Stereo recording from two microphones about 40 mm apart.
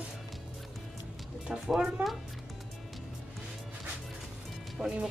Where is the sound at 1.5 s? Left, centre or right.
Centre.